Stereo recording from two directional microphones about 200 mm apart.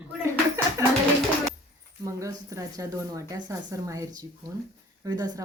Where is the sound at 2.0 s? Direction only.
15° right (ahead or behind).